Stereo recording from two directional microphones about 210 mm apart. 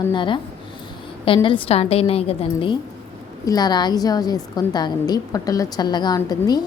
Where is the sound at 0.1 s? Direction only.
20° left (ahead or behind).